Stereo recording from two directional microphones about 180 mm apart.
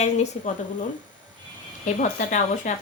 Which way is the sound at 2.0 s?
45° left (ahead or behind).